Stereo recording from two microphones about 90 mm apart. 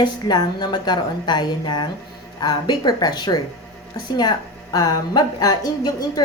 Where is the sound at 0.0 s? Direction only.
50° left (ahead or behind).